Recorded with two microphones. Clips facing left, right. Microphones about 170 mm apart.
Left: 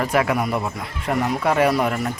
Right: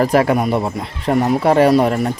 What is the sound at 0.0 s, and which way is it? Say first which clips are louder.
Speech: right 6 dB; 35° right (ahead or behind).